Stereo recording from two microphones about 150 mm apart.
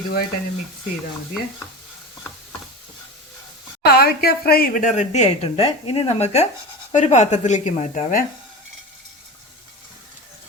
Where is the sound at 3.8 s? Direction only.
90° left; by 8.2 s 55° left (ahead or behind).